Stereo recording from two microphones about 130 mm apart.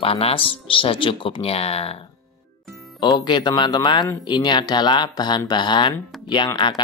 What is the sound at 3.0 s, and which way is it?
Speech, 30° left (ahead or behind).